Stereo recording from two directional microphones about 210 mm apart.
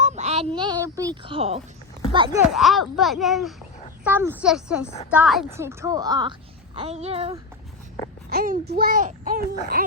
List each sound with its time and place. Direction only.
0.0 s a sound: 30° right (ahead or behind)
0.9 s speech: 20° right (ahead or behind)
2.5 s speech: centre (ahead or behind); by 6.3 s 20° right (ahead or behind)
6.7 s speech: 30° right (ahead or behind)
8.3 s a child's voice: 45° right (ahead or behind)